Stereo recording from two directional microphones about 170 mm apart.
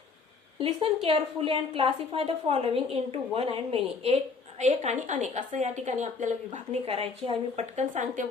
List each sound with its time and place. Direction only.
0.6 s a woman's voice: 35° right (ahead or behind)